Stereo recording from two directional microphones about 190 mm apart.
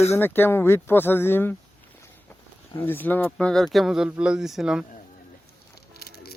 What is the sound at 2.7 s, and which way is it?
A man's voice, 10° left (ahead or behind).